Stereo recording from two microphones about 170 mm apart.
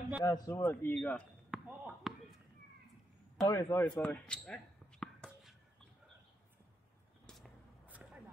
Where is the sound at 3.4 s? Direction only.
15° left (ahead or behind).